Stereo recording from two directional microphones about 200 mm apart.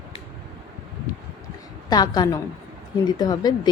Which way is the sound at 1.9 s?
20° left (ahead or behind).